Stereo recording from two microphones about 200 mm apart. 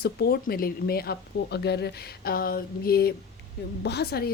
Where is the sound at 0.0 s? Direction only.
50° left (ahead or behind).